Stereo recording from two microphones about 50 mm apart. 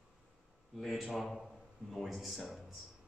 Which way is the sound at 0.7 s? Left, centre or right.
Centre.